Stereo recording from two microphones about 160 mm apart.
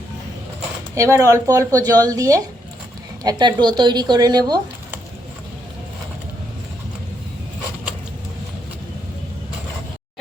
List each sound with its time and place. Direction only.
0.9 s speech: 20° right (ahead or behind)